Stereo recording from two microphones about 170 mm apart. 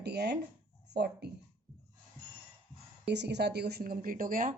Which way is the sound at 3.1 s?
85° right.